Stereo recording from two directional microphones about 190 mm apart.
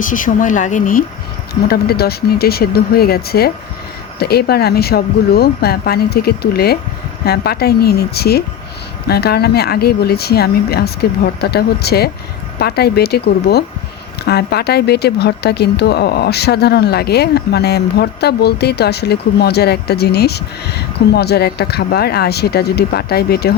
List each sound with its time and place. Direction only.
0.0 s speech: 45° left (ahead or behind)
1.6 s speech: 55° left (ahead or behind)